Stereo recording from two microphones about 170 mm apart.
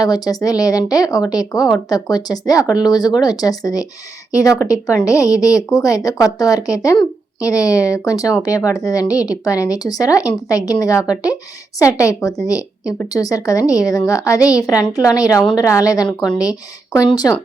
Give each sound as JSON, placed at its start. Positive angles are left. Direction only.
{"t": 0.0, "sound": "speech", "side_deg": 20}